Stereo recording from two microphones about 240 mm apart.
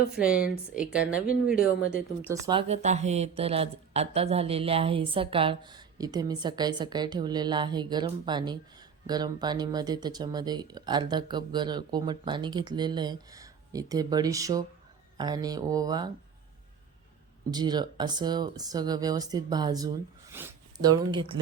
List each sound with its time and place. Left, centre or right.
0.3 s speech: left
0.8 s speech: centre
1.3 s speech: left
2.3 s speech: right
17.5 s speech: centre